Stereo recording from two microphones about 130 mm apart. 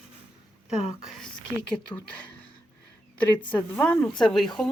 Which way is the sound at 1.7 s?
10° left (ahead or behind).